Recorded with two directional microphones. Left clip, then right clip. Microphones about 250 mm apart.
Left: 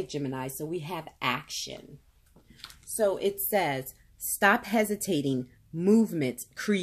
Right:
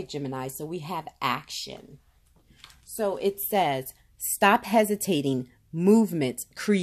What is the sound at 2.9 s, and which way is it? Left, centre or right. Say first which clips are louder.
Speech: even; right.